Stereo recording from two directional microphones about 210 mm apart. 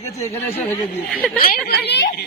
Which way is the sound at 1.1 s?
Centre (ahead or behind).